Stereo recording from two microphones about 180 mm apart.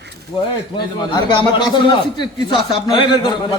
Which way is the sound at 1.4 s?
25° left (ahead or behind).